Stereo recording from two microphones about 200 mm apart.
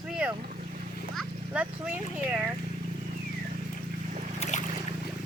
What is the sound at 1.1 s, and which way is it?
A child's voice, 10° right (ahead or behind).